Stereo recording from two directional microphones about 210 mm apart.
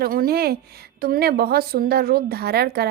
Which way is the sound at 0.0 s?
45° right (ahead or behind).